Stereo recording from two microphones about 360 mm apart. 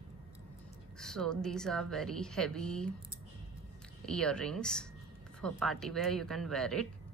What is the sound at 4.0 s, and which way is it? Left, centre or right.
Speech, centre.